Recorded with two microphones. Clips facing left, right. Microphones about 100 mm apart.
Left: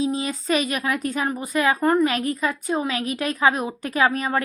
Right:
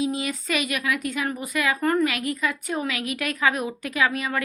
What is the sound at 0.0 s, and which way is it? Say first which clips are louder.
A woman's voice: left 2 dB; 30° left (ahead or behind).